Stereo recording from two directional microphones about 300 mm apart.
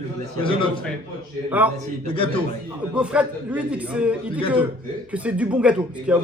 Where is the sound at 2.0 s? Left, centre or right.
Centre.